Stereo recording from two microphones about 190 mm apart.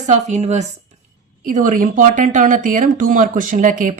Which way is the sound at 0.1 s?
35° right (ahead or behind).